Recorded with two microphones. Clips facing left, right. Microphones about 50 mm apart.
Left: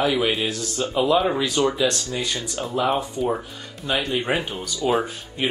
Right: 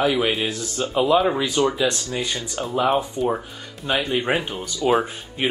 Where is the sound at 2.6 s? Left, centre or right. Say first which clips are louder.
Right 2 dB; centre.